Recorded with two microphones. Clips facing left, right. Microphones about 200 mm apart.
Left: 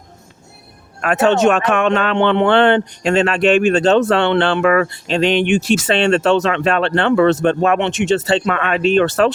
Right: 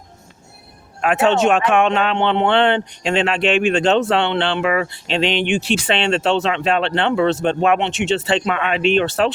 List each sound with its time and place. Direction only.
1.0 s speech: 40° left (ahead or behind)